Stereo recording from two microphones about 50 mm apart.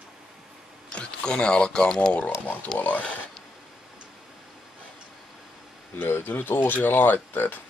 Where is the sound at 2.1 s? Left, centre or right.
Left.